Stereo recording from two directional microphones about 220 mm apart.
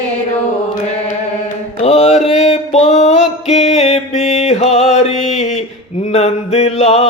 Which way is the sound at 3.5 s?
30° left (ahead or behind).